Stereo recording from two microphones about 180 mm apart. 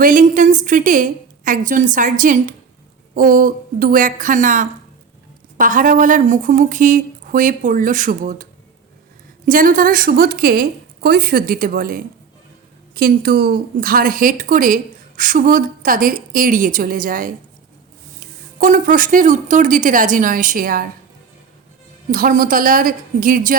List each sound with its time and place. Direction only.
0.0 s a woman's voice: 45° right (ahead or behind)
9.5 s a woman's voice: 50° right (ahead or behind)
18.6 s a woman's voice: 50° right (ahead or behind)
22.1 s a woman's voice: 50° right (ahead or behind)